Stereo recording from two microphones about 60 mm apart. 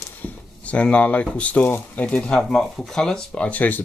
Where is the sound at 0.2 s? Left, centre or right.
Left.